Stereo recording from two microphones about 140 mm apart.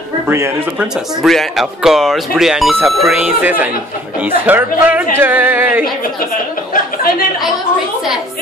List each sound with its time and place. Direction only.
0.3 s speech: 15° right (ahead or behind)
1.2 s speech: centre (ahead or behind)
6.7 s speech: 90° left